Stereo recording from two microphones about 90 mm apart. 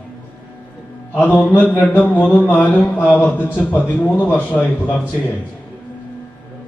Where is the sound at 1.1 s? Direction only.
20° left (ahead or behind).